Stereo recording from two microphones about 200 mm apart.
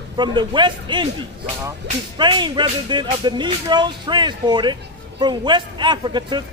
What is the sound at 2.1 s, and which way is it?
Speech, 25° right (ahead or behind).